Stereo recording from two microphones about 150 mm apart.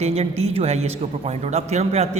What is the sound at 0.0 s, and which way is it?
A man's voice, 45° right (ahead or behind).